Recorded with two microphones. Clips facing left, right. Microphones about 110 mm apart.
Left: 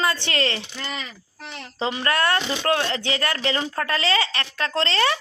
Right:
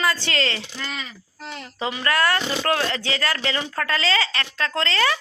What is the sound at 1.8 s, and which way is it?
Speech, 30° left (ahead or behind).